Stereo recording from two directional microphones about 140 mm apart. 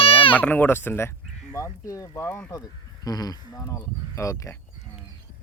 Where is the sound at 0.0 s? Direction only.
40° left (ahead or behind).